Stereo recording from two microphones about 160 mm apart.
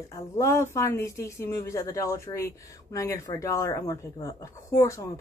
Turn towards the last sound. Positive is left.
turn(degrees=20)  # may be behind; listen again after turning